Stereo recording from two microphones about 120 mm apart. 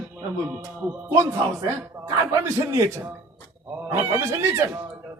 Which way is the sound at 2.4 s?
25° right (ahead or behind).